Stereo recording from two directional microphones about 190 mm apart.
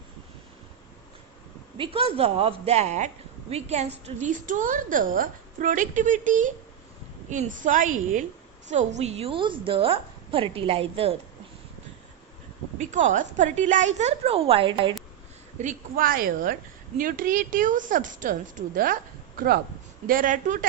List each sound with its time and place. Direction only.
1.8 s a woman's voice: 30° right (ahead or behind)
12.8 s a woman's voice: 40° right (ahead or behind)
15.5 s a woman's voice: 45° right (ahead or behind)